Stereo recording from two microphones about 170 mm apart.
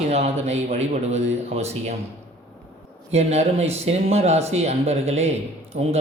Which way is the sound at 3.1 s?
40° right (ahead or behind).